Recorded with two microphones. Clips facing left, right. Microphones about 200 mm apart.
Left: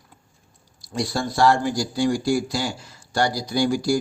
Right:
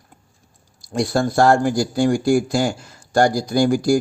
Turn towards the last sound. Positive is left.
turn(degrees=-50)  # may be behind; listen again after turning